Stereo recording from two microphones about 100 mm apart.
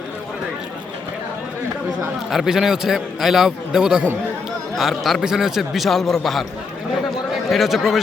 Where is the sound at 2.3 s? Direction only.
5° right (ahead or behind).